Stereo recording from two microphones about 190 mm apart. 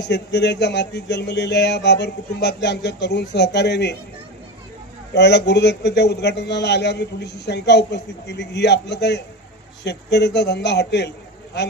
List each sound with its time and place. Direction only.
0.0 s a man's voice: 65° left (ahead or behind)
5.1 s a man's voice: 65° left (ahead or behind)